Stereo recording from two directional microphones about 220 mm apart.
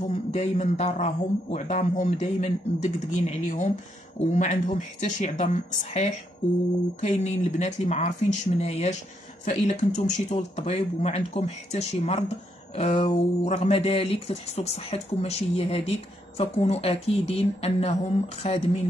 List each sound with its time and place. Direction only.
0.1 s a man's voice: 30° left (ahead or behind)